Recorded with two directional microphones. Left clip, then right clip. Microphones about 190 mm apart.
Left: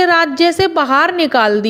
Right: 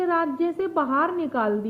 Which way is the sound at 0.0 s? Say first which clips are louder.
Left 12 dB; 40° left (ahead or behind).